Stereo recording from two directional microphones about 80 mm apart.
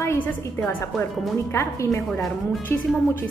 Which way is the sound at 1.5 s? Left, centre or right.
Left.